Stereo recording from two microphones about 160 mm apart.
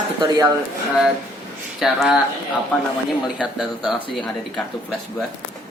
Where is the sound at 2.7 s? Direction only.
10° left (ahead or behind).